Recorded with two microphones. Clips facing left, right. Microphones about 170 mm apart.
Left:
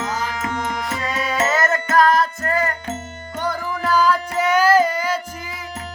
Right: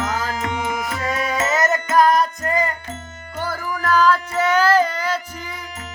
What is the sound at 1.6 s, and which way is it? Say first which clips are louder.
Music: right 2 dB; 20° right (ahead or behind).